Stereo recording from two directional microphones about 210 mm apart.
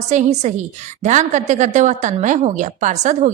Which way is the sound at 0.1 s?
35° right (ahead or behind).